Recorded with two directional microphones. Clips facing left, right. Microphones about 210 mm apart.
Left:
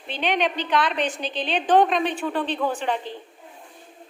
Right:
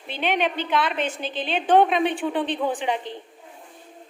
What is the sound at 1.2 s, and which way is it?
Speech, 50° right (ahead or behind).